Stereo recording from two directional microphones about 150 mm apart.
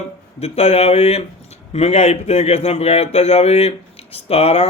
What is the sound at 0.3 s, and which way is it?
Speech, 45° left (ahead or behind).